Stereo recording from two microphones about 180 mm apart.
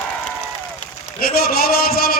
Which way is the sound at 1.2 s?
55° left (ahead or behind).